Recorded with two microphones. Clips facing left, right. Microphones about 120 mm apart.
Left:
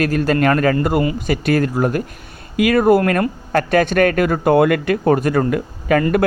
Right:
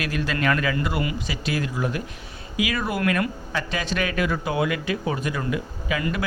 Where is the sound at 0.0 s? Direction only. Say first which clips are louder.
Left 9 dB; 45° left (ahead or behind).